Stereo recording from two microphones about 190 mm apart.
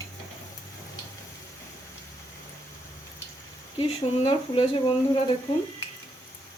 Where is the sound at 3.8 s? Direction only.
30° left (ahead or behind).